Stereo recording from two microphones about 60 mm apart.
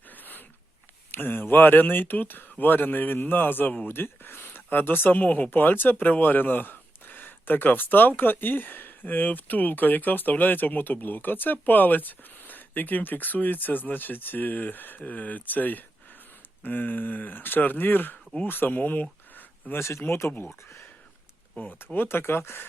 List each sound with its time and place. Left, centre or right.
0.1 s a sound: left
1.1 s speech: left
19.7 s speech: left
21.6 s speech: left